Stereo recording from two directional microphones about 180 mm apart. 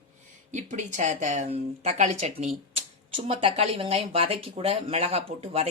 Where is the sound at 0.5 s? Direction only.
40° right (ahead or behind).